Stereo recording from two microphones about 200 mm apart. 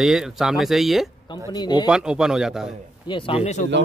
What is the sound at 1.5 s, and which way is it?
Speech, 20° left (ahead or behind).